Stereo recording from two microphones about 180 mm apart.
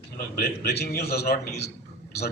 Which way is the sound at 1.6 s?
65° left (ahead or behind).